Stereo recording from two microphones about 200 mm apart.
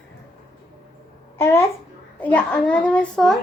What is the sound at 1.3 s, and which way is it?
Babbling, 15° left (ahead or behind).